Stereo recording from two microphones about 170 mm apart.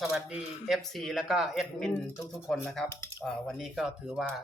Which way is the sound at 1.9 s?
15° left (ahead or behind).